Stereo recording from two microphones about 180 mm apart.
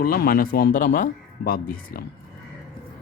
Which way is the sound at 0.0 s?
55° left (ahead or behind).